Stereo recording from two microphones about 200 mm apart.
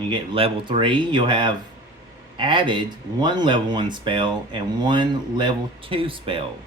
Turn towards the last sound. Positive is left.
turn(degrees=-25)  # may be behind; listen again after turning